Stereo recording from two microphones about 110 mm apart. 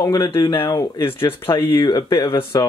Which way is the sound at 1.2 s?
20° left (ahead or behind).